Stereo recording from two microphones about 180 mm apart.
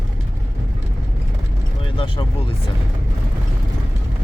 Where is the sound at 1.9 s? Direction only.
30° left (ahead or behind).